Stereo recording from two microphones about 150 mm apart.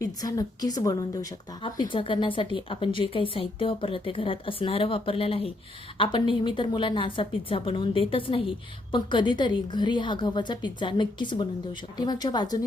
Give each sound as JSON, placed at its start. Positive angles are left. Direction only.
{"t": 0.0, "sound": "a woman's voice", "side_deg": 25}
{"t": 1.6, "sound": "a woman's voice", "side_deg": 35}